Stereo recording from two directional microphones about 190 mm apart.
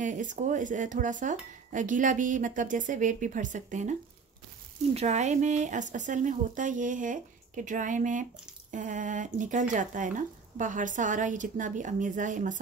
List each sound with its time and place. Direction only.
0.0 s speech: 40° right (ahead or behind)
4.9 s speech: 35° right (ahead or behind)